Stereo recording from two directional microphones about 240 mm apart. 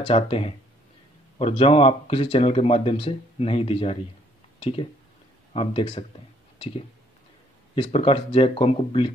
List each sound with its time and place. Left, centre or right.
0.0 s speech: left
7.7 s speech: left